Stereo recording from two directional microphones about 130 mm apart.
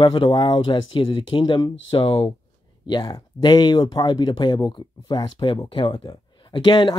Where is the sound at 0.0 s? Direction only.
40° left (ahead or behind).